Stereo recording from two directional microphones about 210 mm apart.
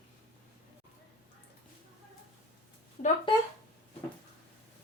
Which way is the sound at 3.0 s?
40° left (ahead or behind).